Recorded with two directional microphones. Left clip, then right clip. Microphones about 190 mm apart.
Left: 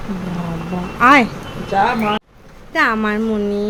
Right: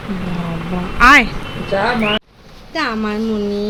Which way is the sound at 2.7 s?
15° left (ahead or behind).